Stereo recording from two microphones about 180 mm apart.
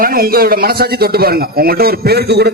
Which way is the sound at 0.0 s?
55° right (ahead or behind).